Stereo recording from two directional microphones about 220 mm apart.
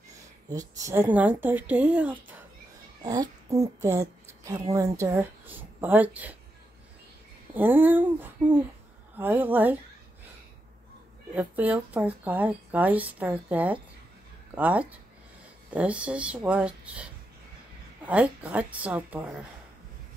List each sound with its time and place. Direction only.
0.5 s a child's voice: 15° right (ahead or behind)
7.5 s speech: 10° right (ahead or behind)
11.3 s speech: 5° right (ahead or behind)